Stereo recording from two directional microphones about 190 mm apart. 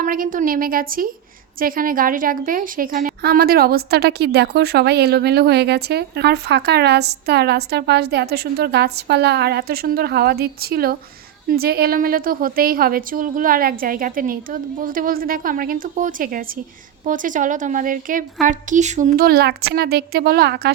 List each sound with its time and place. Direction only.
0.0 s a woman's voice: 45° right (ahead or behind)